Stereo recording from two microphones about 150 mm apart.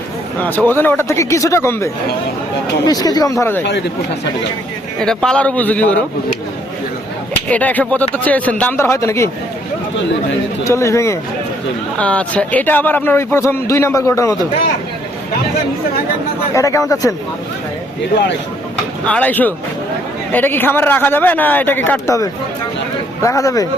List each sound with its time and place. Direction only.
0.3 s a man's voice: 10° left (ahead or behind)
4.9 s a man's voice: 5° left (ahead or behind)
7.4 s a man's voice: 10° left (ahead or behind)
10.6 s speech: 20° left (ahead or behind)
11.9 s a man's voice: 10° left (ahead or behind)
16.6 s speech: 20° left (ahead or behind)
19.0 s a man's voice: 10° left (ahead or behind)